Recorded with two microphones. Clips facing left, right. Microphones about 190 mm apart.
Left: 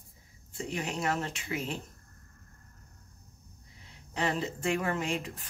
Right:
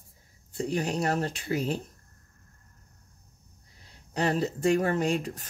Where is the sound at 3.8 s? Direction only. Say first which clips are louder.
Right 4 dB; 40° right (ahead or behind).